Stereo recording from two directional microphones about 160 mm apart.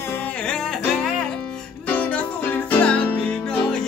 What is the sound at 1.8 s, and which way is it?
Music, 10° left (ahead or behind).